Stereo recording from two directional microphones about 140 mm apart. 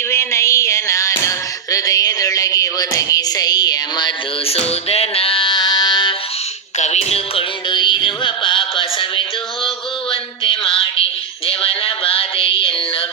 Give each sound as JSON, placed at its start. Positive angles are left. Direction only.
{"t": 0.1, "sound": "a sound", "side_deg": 20}
{"t": 4.4, "sound": "music", "side_deg": 45}
{"t": 6.7, "sound": "music", "side_deg": 55}
{"t": 7.7, "sound": "music", "side_deg": 35}